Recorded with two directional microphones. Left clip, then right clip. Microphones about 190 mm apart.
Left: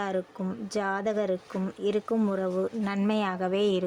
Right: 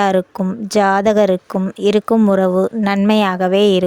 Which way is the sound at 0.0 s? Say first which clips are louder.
Right 15 dB; 55° right (ahead or behind).